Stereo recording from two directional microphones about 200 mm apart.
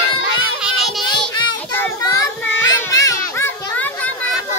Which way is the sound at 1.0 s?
25° left (ahead or behind).